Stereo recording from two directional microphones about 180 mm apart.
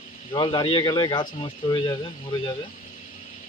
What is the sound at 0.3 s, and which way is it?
Speech, 25° left (ahead or behind).